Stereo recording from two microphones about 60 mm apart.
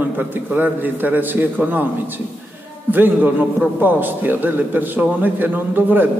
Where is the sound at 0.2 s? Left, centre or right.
Right.